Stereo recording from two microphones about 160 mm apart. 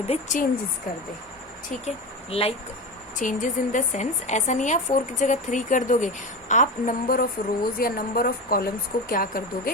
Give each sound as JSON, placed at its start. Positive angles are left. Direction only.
{"t": 0.1, "sound": "a woman's voice", "side_deg": 50}
{"t": 2.3, "sound": "speech", "side_deg": 40}
{"t": 3.2, "sound": "a woman's voice", "side_deg": 55}